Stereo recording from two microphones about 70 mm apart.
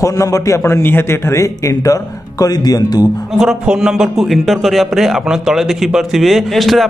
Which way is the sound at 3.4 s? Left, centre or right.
Centre.